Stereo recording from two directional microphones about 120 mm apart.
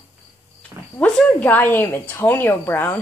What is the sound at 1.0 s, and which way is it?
A woman's voice, 10° left (ahead or behind).